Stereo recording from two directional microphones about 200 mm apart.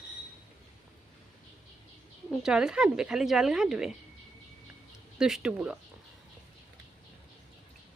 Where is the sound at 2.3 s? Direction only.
5° right (ahead or behind).